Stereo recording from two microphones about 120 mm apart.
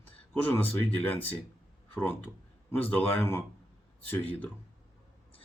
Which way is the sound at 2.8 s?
15° left (ahead or behind).